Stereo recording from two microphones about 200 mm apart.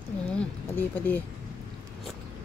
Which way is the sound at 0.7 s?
10° left (ahead or behind).